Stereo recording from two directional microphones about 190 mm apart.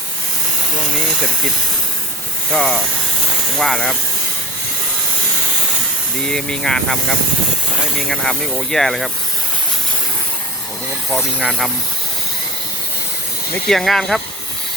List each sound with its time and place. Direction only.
2.5 s speech: 5° left (ahead or behind)
6.2 s speech: 5° left (ahead or behind)
11.1 s speech: centre (ahead or behind)
13.5 s speech: centre (ahead or behind)